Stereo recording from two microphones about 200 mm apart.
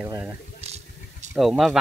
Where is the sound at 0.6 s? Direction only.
30° right (ahead or behind).